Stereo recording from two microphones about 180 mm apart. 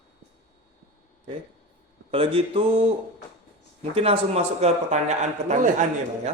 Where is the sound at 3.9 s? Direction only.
35° right (ahead or behind).